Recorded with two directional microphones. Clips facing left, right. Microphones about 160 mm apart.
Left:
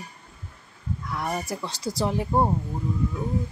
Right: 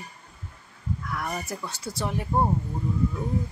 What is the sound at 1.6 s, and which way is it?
Speech, 35° left (ahead or behind).